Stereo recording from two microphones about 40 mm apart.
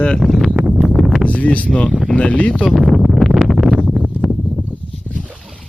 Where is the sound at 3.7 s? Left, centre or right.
Right.